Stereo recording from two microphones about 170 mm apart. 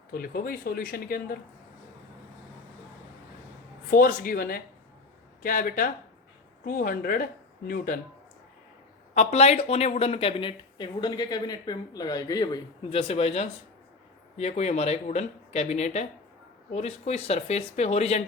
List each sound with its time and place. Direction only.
0.1 s speech: 60° left (ahead or behind)
3.8 s speech: 55° left (ahead or behind)
9.1 s speech: 40° left (ahead or behind)